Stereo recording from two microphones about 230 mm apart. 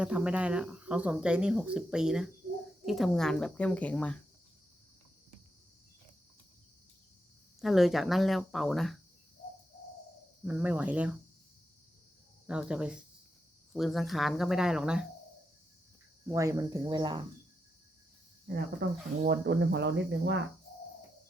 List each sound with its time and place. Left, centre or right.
0.0 s speech: centre
7.6 s speech: centre
10.4 s speech: centre
12.5 s speech: centre
16.2 s speech: centre
18.4 s speech: right